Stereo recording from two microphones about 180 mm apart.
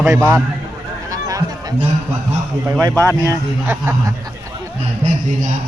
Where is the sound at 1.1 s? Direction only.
20° right (ahead or behind).